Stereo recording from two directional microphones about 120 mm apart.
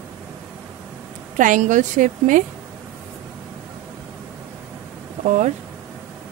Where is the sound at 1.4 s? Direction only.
90° right.